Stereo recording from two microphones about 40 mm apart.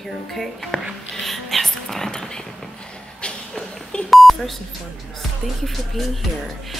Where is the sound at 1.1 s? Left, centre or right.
Centre.